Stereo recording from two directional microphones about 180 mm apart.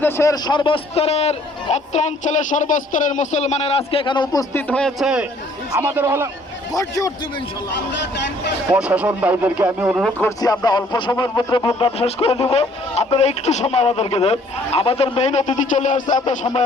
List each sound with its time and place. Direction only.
0.0 s a man's voice: 15° left (ahead or behind)
4.7 s a man's voice: 5° left (ahead or behind)
6.7 s a man's voice: 20° left (ahead or behind)
8.7 s speech: 10° right (ahead or behind)
10.2 s speech: 20° left (ahead or behind)
11.9 s a man's voice: 35° left (ahead or behind)